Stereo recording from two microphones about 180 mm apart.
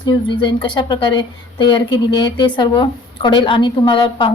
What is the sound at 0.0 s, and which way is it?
A woman's voice, 25° left (ahead or behind).